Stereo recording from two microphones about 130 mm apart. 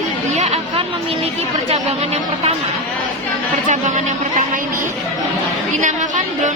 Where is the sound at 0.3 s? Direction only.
55° right (ahead or behind).